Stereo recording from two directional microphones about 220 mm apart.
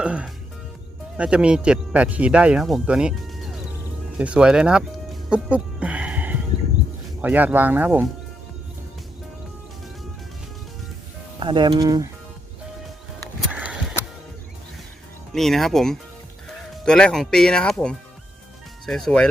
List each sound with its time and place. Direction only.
0.0 s speech: 5° right (ahead or behind)
4.2 s speech: 5° right (ahead or behind)
5.3 s music: 5° right (ahead or behind)
7.2 s speech: 5° right (ahead or behind)
11.3 s speech: 20° right (ahead or behind)
13.1 s music: 5° right (ahead or behind)
15.3 s speech: centre (ahead or behind)